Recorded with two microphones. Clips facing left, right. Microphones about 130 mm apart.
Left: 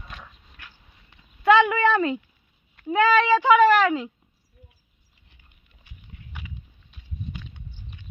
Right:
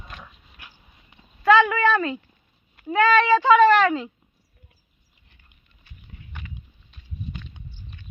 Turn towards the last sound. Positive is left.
turn(degrees=10)  # may be behind; listen again after turning